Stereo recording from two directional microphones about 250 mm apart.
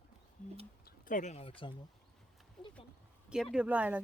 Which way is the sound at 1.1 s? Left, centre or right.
Left.